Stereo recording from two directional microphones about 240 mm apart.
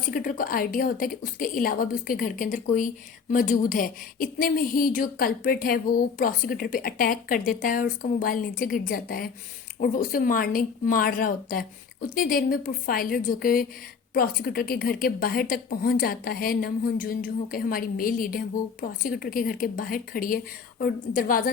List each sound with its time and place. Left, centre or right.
0.0 s a woman's voice: left